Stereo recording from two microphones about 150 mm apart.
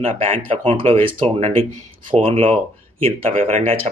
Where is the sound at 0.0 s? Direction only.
40° right (ahead or behind).